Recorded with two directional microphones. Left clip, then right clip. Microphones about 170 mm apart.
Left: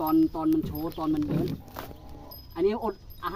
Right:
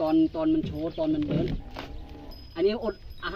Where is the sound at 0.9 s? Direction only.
10° right (ahead or behind).